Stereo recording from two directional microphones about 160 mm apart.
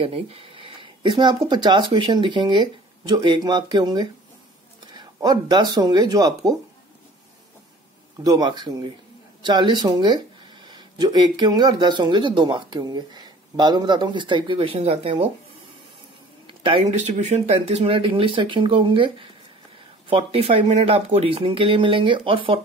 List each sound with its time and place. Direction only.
0.0 s speech: 35° right (ahead or behind)
8.2 s speech: 25° right (ahead or behind)
16.4 s speech: 35° right (ahead or behind)